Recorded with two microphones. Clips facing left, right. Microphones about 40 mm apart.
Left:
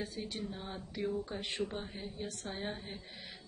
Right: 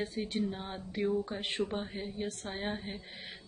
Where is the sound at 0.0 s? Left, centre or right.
Right.